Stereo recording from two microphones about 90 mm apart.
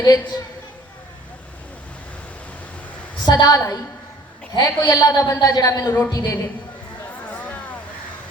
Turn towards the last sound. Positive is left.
turn(degrees=15)  # may be behind; listen again after turning